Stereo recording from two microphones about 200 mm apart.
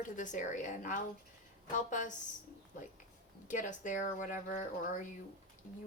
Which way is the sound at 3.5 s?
40° left (ahead or behind).